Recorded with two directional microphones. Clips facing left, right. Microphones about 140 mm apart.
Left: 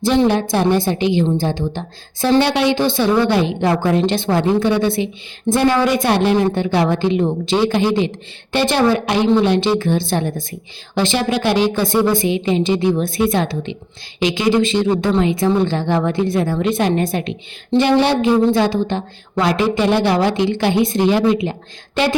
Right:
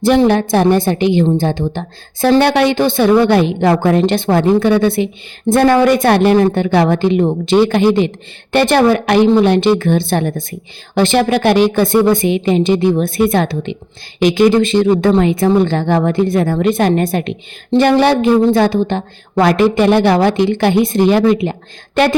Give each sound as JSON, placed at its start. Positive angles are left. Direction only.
{"t": 0.0, "sound": "a woman's voice", "side_deg": -60}